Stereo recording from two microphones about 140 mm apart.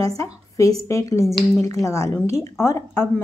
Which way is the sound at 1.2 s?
Centre (ahead or behind).